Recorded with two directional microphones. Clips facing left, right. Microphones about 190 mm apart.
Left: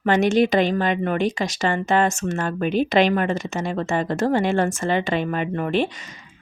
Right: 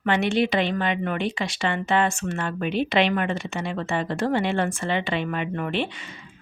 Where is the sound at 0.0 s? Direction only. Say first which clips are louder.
Left 4 dB; 45° left (ahead or behind).